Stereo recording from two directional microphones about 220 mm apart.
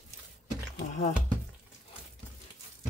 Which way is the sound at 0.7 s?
30° left (ahead or behind).